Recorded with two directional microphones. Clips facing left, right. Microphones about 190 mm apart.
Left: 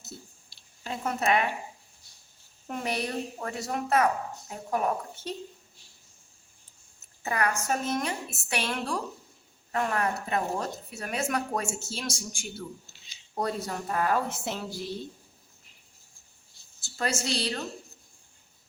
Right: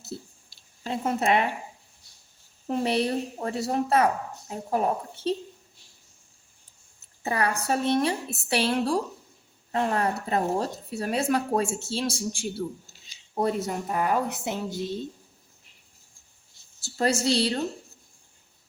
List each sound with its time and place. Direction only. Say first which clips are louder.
0.1 s a sound: right 8 dB; 30° right (ahead or behind)
0.9 s speech: right 3 dB; 30° right (ahead or behind)
2.6 s speech: right 7 dB; 30° right (ahead or behind)
7.2 s speech: right 2 dB; 30° right (ahead or behind)
13.3 s a woman's voice: right 5 dB; 20° right (ahead or behind)
16.8 s speech: right 7 dB; 35° right (ahead or behind)